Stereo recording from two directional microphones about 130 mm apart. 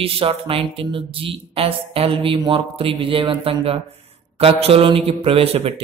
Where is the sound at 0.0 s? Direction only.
45° right (ahead or behind).